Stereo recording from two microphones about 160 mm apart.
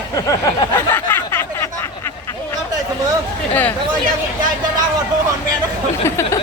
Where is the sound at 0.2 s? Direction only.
20° left (ahead or behind).